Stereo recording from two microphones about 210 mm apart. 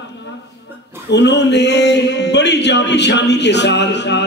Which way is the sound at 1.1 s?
55° left (ahead or behind).